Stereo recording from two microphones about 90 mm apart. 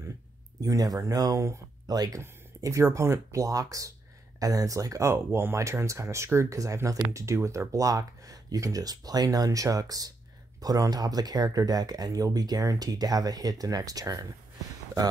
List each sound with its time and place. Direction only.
0.6 s speech: 45° right (ahead or behind)
2.6 s speech: 35° right (ahead or behind)